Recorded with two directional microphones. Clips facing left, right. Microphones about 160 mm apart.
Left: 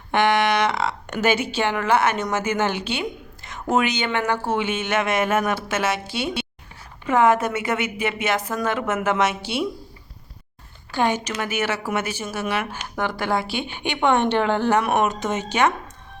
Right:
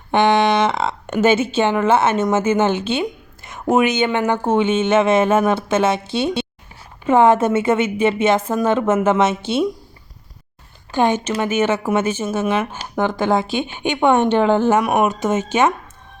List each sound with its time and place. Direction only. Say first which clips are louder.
0.1 s a woman's voice: right 4 dB; 25° right (ahead or behind)
10.9 s speech: right 5 dB; 20° right (ahead or behind)